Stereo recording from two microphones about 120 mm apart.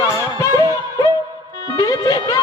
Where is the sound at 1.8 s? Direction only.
35° left (ahead or behind).